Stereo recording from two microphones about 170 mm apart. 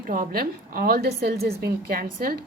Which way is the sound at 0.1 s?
55° right (ahead or behind).